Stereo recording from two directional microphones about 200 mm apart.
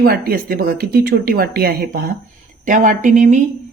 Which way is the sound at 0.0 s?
50° right (ahead or behind).